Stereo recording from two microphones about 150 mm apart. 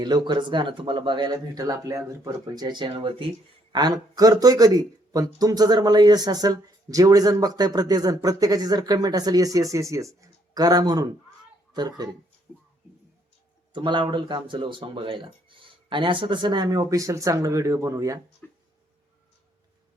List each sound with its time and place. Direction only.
0.0 s a child's voice: 30° right (ahead or behind)
13.7 s speech: 30° right (ahead or behind)
18.4 s a sound: 10° left (ahead or behind)